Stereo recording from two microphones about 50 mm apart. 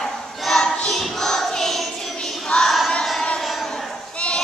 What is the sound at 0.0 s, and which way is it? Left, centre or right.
Child singing, centre.